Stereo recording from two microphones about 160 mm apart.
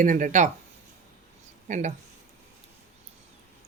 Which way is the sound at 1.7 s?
45° right (ahead or behind).